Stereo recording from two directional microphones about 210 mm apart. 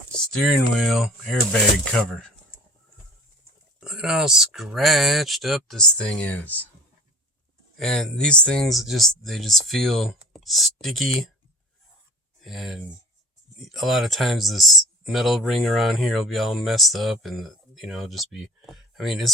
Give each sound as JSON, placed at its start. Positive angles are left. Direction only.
{"t": 0.1, "sound": "speech", "side_deg": 0}
{"t": 3.8, "sound": "speech", "side_deg": -5}
{"t": 7.8, "sound": "speech", "side_deg": 0}
{"t": 12.4, "sound": "speech", "side_deg": 0}